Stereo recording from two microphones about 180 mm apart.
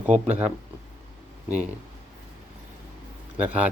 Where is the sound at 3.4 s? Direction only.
10° right (ahead or behind).